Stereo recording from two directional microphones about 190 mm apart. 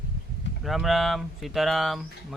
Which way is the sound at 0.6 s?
Centre (ahead or behind).